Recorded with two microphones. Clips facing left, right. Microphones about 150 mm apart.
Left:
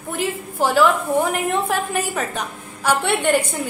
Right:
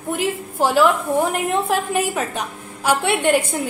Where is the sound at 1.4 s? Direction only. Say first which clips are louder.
Right 1 dB; 5° right (ahead or behind).